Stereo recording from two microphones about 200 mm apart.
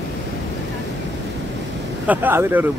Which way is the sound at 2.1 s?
10° right (ahead or behind).